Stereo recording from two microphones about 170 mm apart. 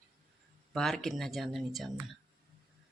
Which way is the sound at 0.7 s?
Centre (ahead or behind).